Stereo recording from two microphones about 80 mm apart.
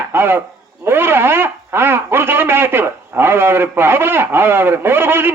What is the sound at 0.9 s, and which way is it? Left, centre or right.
Speech, right.